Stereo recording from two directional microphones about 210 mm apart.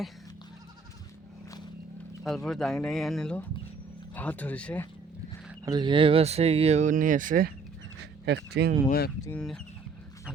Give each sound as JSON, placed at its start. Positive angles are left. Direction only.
{"t": 2.2, "sound": "speech", "side_deg": 0}
{"t": 5.6, "sound": "speech", "side_deg": -20}
{"t": 8.2, "sound": "speech", "side_deg": -55}
{"t": 8.9, "sound": "speech", "side_deg": 45}
{"t": 9.2, "sound": "speech", "side_deg": 5}